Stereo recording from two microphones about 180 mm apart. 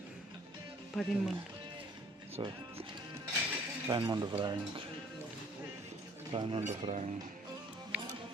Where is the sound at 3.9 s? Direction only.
25° right (ahead or behind).